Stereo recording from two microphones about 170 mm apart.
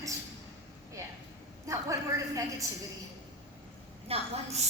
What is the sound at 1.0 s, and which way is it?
Speech, 20° right (ahead or behind).